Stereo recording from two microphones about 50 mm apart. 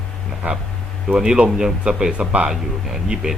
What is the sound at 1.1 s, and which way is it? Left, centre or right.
A man's voice, centre.